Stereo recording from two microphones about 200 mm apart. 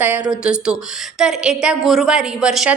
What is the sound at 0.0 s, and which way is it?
A woman's voice, 5° right (ahead or behind).